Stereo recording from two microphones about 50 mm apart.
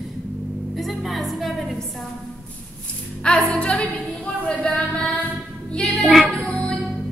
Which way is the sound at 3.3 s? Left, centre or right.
Left.